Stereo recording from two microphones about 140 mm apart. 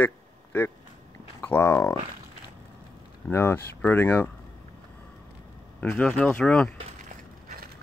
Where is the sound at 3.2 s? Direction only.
15° left (ahead or behind).